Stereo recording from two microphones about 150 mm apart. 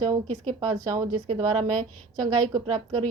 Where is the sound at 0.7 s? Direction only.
25° right (ahead or behind).